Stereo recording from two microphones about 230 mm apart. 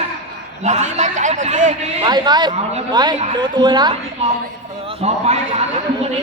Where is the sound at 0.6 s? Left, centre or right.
Right.